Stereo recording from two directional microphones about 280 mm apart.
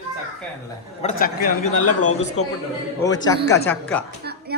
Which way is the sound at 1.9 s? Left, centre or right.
Left.